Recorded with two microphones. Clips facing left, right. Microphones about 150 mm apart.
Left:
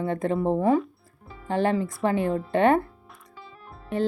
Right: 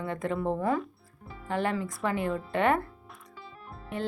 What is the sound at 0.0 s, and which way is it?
Speech, 30° left (ahead or behind).